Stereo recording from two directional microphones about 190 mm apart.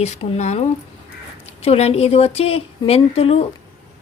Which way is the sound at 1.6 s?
35° left (ahead or behind).